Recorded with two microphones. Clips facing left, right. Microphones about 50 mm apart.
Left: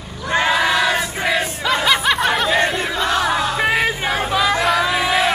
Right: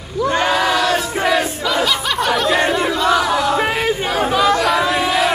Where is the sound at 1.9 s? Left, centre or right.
Centre.